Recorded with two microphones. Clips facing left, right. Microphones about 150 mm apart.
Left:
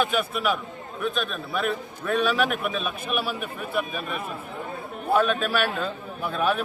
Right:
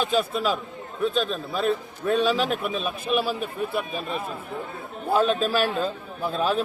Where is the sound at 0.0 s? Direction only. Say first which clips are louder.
Right 1 dB; 30° right (ahead or behind).